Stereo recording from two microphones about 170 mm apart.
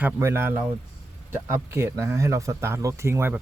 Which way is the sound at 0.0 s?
15° right (ahead or behind).